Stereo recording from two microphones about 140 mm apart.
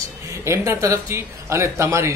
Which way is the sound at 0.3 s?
20° right (ahead or behind).